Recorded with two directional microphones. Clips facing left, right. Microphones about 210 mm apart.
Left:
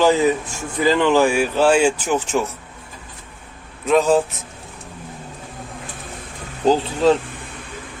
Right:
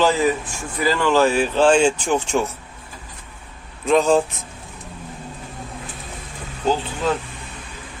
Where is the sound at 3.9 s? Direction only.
5° left (ahead or behind).